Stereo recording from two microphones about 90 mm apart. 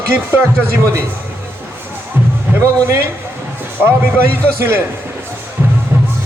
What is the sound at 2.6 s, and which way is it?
A man's voice, 35° right (ahead or behind).